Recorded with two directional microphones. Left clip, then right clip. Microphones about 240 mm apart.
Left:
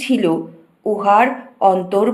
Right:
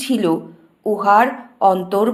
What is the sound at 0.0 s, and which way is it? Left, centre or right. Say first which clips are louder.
A woman's voice: left 1 dB; centre.